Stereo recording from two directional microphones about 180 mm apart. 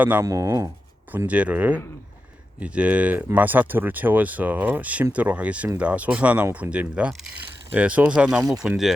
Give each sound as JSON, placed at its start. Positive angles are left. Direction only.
{"t": 0.0, "sound": "speech", "side_deg": -10}